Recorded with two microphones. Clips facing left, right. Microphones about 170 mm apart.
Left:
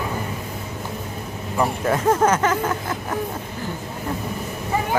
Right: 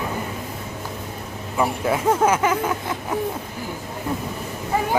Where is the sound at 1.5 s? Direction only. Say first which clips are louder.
Even; 5° right (ahead or behind).